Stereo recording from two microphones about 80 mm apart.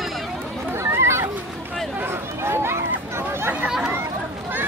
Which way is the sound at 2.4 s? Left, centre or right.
Right.